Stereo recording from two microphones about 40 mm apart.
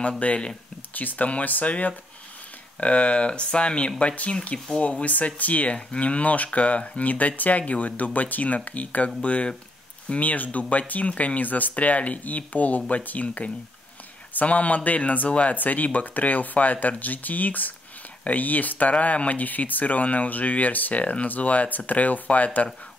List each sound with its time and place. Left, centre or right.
0.2 s speech: left
15.5 s speech: left